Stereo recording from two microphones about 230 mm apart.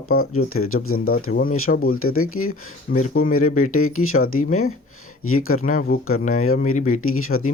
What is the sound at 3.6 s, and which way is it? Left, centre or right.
Speech, left.